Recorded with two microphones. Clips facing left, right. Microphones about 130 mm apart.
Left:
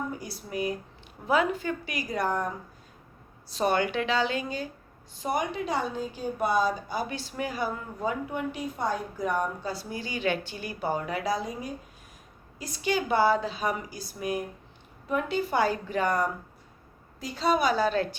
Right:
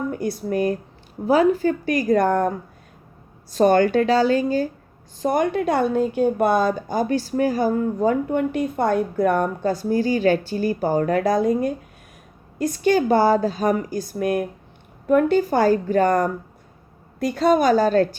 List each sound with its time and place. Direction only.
0.1 s a woman's voice: 55° right (ahead or behind)
3.5 s a woman's voice: 45° right (ahead or behind)
17.2 s a woman's voice: 55° right (ahead or behind)